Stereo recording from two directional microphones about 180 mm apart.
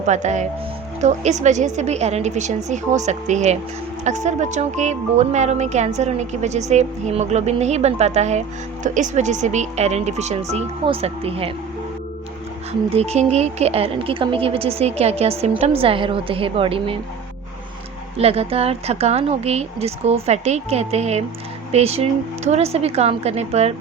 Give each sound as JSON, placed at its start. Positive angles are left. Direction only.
{"t": 0.0, "sound": "speech", "side_deg": -40}
{"t": 12.9, "sound": "speech", "side_deg": -35}
{"t": 18.2, "sound": "speech", "side_deg": -35}